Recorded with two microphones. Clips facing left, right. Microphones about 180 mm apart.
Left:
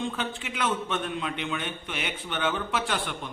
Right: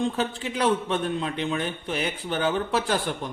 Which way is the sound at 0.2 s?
35° right (ahead or behind).